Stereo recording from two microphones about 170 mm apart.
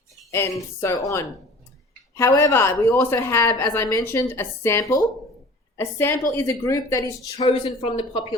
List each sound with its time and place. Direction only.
0.3 s a woman's voice: 15° left (ahead or behind)